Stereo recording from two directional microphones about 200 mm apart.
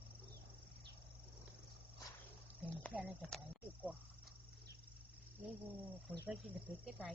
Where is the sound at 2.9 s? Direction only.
5° right (ahead or behind).